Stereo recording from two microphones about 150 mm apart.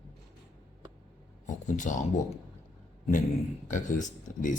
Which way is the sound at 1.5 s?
55° left (ahead or behind).